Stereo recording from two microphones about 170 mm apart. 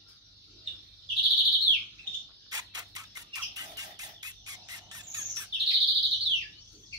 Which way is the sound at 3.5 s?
20° right (ahead or behind).